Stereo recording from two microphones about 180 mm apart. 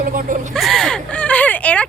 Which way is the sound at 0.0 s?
50° right (ahead or behind).